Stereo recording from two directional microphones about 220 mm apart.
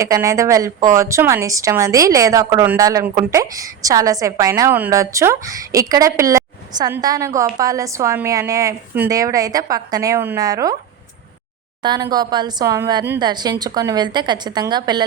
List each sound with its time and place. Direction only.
0.0 s a woman's voice: 15° right (ahead or behind)
11.8 s a woman's voice: 20° right (ahead or behind)